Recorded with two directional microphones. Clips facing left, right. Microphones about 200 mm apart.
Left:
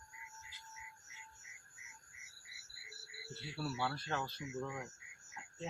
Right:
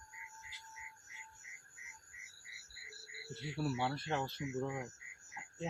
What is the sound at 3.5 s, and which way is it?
Speech, 15° right (ahead or behind).